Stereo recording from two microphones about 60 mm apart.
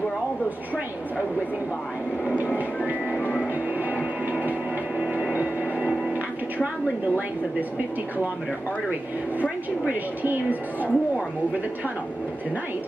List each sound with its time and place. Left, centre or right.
2.3 s music: right
3.9 s music: right
5.3 s a sound: right
9.4 s a woman's voice: right